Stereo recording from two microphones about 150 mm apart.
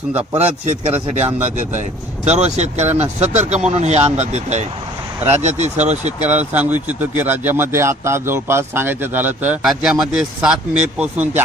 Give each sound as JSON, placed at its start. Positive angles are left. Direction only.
{"t": 0.3, "sound": "a man's voice", "side_deg": -45}
{"t": 6.5, "sound": "speech", "side_deg": -10}